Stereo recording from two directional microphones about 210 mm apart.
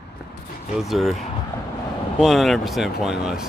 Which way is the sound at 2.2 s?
Centre (ahead or behind).